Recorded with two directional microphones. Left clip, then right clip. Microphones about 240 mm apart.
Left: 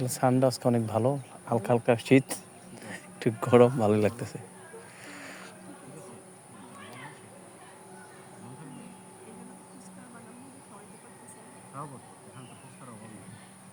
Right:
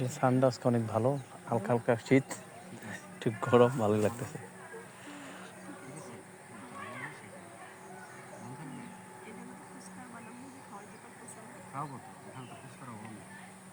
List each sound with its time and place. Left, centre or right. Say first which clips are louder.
0.0 s speech: left 3 dB; left
5.0 s music: left 3 dB; left